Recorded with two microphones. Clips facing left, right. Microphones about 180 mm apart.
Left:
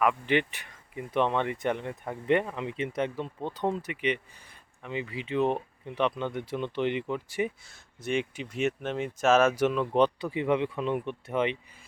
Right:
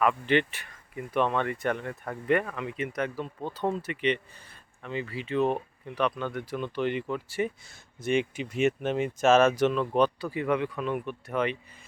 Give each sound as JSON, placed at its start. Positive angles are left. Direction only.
{"t": 0.0, "sound": "speech", "side_deg": 15}
{"t": 7.7, "sound": "speech", "side_deg": 0}
{"t": 9.9, "sound": "speech", "side_deg": 20}